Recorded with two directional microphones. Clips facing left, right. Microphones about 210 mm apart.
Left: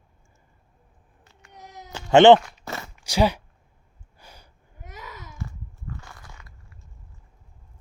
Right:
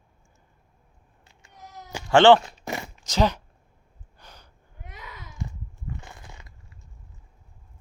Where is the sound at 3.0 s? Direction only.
10° left (ahead or behind).